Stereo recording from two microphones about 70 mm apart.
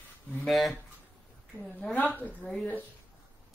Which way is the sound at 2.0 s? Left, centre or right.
Left.